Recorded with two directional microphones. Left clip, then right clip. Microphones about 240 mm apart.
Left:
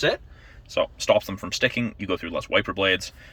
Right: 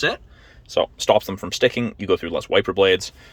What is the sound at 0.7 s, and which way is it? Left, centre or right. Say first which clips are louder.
Speech: right 3 dB; right.